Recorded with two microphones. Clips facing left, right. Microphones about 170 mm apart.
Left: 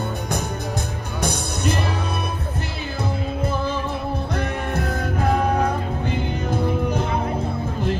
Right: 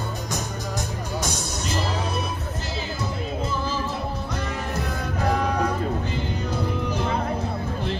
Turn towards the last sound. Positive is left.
turn(degrees=55)  # may be behind; listen again after turning